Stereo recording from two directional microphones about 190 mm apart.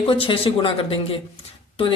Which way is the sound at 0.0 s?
25° left (ahead or behind).